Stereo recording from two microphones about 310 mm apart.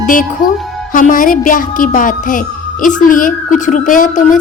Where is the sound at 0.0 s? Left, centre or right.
Left.